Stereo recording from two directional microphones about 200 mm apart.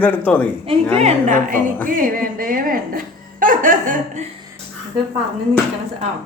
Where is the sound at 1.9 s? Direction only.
45° right (ahead or behind).